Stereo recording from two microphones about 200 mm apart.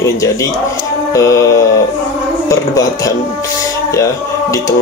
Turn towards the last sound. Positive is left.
turn(degrees=15)  # may be behind; listen again after turning